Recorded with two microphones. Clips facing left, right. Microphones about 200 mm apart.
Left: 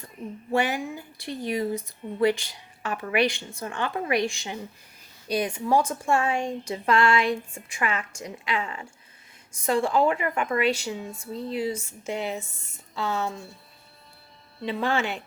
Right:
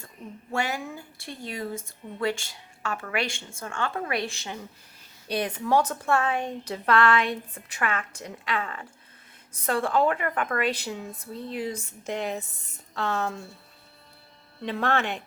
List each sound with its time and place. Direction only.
0.5 s a woman's voice: 20° left (ahead or behind)
14.6 s a woman's voice: 5° left (ahead or behind)